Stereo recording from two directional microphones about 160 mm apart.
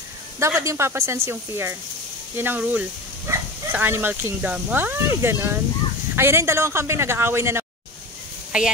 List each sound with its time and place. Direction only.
0.4 s a woman's voice: 20° right (ahead or behind)